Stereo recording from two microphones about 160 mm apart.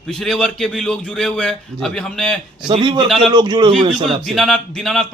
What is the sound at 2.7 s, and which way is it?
Speech, 30° right (ahead or behind).